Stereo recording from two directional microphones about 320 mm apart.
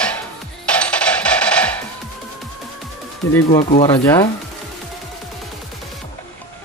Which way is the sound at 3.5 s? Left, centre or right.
Centre.